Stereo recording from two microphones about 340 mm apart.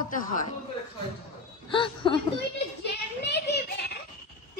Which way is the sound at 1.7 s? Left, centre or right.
Centre.